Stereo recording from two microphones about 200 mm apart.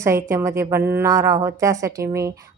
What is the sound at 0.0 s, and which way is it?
A woman's voice, 15° right (ahead or behind).